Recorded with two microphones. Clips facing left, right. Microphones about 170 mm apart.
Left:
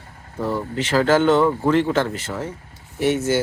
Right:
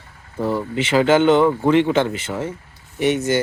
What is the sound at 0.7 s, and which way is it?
Speech, centre (ahead or behind).